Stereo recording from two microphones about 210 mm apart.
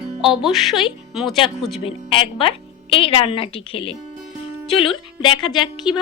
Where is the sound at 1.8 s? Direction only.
25° left (ahead or behind).